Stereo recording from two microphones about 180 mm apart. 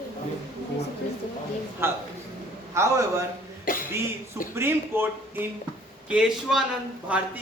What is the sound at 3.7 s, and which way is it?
Cough, 50° left (ahead or behind).